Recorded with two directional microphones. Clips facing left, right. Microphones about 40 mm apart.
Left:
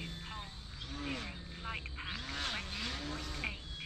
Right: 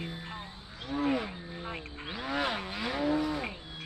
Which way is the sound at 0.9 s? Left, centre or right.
Centre.